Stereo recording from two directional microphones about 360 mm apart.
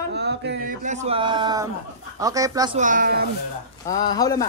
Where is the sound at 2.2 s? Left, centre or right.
Centre; by 3.3 s right.